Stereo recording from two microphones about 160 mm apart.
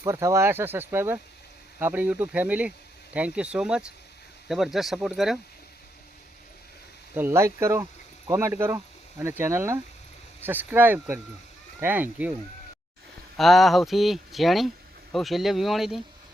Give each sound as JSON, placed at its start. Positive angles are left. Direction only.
{"t": 0.0, "sound": "speech", "side_deg": -20}
{"t": 7.1, "sound": "speech", "side_deg": -15}
{"t": 13.3, "sound": "speech", "side_deg": 0}